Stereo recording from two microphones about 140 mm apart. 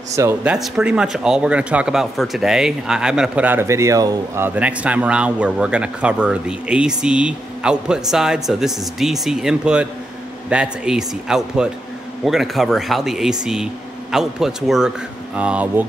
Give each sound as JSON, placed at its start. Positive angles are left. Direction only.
{"t": 0.1, "sound": "speech", "side_deg": -20}
{"t": 0.4, "sound": "speech", "side_deg": -5}
{"t": 4.5, "sound": "speech", "side_deg": -10}